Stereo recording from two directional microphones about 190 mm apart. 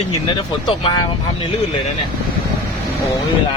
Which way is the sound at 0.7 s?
25° left (ahead or behind).